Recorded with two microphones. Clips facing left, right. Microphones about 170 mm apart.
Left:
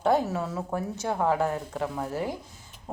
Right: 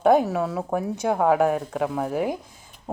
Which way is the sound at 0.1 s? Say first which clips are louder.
Right 5 dB; 15° right (ahead or behind).